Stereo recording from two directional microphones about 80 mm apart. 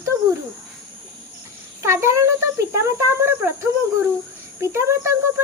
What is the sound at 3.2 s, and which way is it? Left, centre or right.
A child's voice, right.